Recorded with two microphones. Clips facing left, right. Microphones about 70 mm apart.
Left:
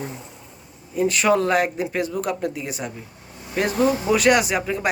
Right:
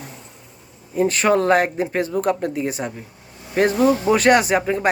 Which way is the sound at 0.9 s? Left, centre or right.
Right.